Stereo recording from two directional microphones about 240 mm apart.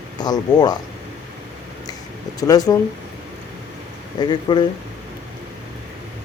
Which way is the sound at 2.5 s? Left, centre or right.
Centre.